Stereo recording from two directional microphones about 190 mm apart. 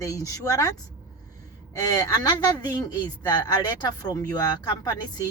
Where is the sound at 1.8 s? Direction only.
20° left (ahead or behind).